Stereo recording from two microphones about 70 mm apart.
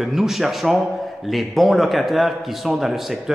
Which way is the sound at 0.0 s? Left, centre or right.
Centre.